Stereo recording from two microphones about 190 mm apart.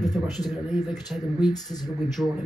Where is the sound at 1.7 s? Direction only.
20° left (ahead or behind).